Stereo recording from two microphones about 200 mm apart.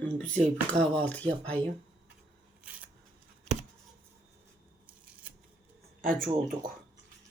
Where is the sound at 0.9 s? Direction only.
10° left (ahead or behind).